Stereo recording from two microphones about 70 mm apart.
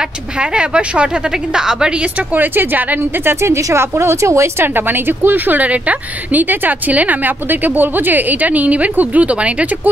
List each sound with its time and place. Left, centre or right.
0.0 s a woman's voice: centre
2.3 s a woman's voice: right
3.3 s speech: right
4.6 s a woman's voice: right